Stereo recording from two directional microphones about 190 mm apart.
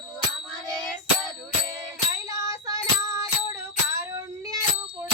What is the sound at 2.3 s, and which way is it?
Child singing, 20° right (ahead or behind).